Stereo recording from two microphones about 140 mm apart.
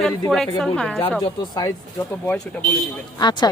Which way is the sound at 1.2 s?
30° left (ahead or behind).